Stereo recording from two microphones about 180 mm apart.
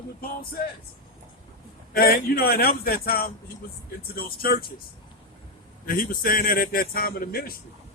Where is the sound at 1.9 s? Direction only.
60° left (ahead or behind).